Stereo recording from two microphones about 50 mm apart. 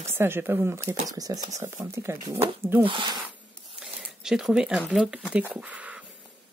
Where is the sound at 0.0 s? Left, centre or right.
Right.